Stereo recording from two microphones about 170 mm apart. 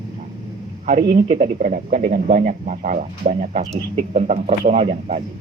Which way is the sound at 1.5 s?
50° right (ahead or behind).